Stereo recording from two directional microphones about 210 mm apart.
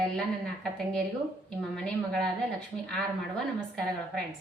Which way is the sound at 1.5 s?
5° left (ahead or behind).